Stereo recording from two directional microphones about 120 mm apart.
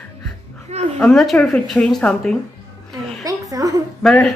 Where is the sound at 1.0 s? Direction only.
Centre (ahead or behind).